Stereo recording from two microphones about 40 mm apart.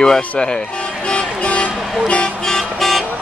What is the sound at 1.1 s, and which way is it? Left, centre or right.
Vehicle, left.